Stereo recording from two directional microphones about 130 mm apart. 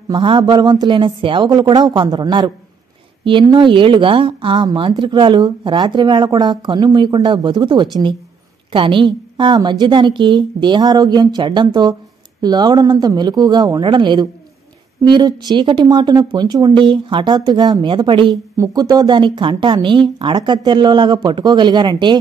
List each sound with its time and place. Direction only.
0.1 s a woman's voice: 40° right (ahead or behind)